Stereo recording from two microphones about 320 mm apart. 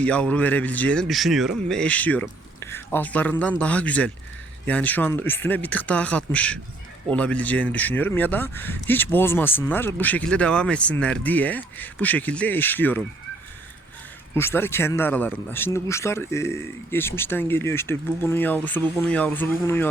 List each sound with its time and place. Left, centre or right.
0.0 s speech: centre
14.3 s speech: centre